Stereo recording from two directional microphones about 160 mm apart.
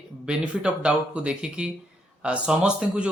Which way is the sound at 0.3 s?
5° right (ahead or behind).